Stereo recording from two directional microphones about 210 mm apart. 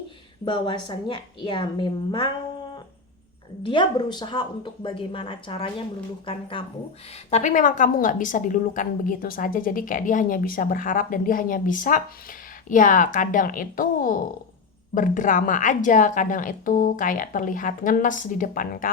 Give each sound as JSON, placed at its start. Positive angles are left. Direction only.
{"t": 0.4, "sound": "speech", "side_deg": 25}
{"t": 3.6, "sound": "a woman's voice", "side_deg": 20}